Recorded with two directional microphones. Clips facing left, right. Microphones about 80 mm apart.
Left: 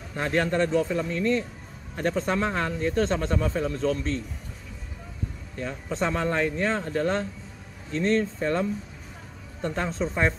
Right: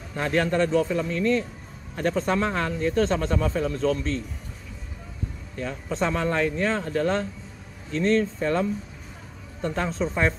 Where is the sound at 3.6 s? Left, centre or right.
Right.